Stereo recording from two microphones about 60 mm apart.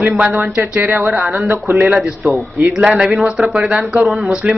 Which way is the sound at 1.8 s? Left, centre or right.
Centre.